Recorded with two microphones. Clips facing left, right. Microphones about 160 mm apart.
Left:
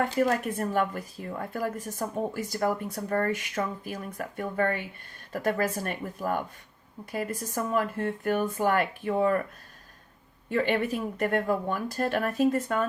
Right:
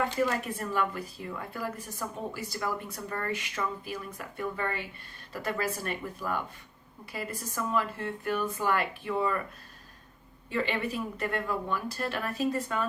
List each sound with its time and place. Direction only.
0.0 s a woman's voice: 45° left (ahead or behind)
10.5 s a woman's voice: 50° left (ahead or behind)